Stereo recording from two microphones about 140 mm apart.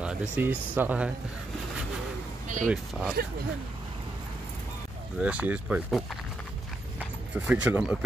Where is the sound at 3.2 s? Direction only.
90° right.